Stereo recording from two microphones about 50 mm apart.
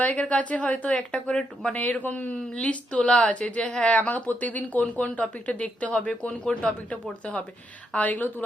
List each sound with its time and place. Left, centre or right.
0.0 s speech: left
1.7 s speech: left
7.9 s speech: left